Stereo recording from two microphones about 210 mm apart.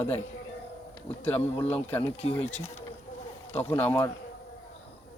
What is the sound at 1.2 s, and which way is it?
Speech, 10° left (ahead or behind).